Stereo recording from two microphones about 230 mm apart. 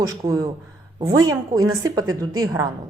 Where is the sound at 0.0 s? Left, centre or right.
Centre.